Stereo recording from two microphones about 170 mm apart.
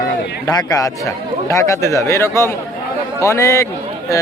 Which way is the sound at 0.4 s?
20° left (ahead or behind).